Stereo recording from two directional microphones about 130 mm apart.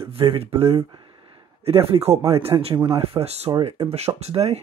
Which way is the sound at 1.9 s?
55° right (ahead or behind).